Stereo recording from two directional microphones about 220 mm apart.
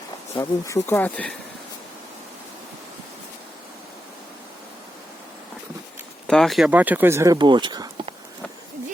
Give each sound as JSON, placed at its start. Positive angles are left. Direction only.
{"t": 0.3, "sound": "speech", "side_deg": 10}
{"t": 6.2, "sound": "speech", "side_deg": 0}